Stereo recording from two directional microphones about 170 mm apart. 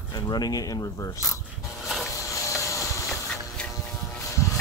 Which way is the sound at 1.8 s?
Centre (ahead or behind).